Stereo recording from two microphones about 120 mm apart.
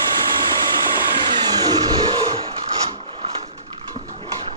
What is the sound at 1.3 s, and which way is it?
Vehicle, 35° right (ahead or behind).